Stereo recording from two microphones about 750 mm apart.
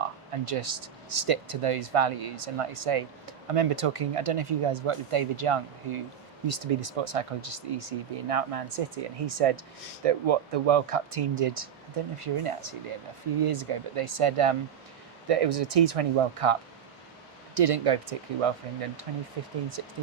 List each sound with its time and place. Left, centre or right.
0.0 s speech: right